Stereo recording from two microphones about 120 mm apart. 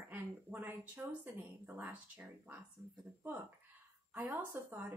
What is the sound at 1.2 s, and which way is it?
Speech, 15° right (ahead or behind).